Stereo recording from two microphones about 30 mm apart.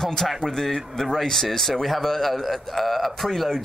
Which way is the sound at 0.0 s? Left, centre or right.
Centre.